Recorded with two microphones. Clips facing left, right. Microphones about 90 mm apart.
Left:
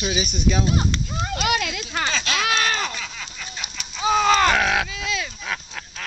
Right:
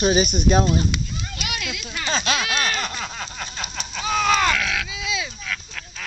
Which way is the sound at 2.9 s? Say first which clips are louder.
Right 3 dB; 45° right (ahead or behind).